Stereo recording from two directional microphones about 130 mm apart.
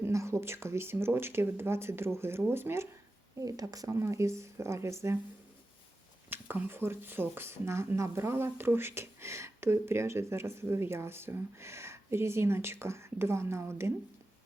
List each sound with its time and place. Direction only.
0.0 s speech: 20° right (ahead or behind)
6.3 s speech: 15° right (ahead or behind)